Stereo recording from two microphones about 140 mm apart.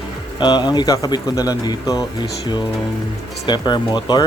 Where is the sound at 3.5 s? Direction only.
30° left (ahead or behind).